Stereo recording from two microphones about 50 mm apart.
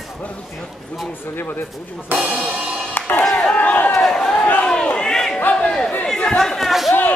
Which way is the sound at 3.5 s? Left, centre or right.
Left.